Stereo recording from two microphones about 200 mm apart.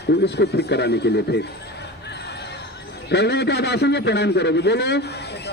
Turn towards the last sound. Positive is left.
turn(degrees=55)  # may be behind; listen again after turning